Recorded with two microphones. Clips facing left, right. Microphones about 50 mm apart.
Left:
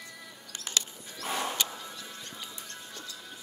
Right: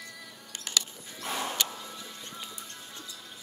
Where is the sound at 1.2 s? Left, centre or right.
Centre.